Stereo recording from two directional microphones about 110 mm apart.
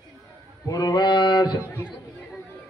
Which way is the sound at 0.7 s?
40° left (ahead or behind).